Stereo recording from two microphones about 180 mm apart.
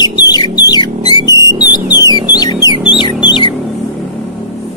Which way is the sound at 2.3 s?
20° left (ahead or behind).